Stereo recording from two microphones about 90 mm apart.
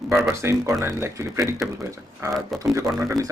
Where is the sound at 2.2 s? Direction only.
35° right (ahead or behind).